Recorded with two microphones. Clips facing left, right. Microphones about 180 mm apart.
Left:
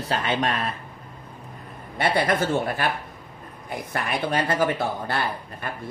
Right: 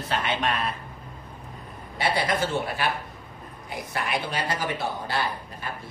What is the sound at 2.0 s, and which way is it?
Speech, 55° left (ahead or behind).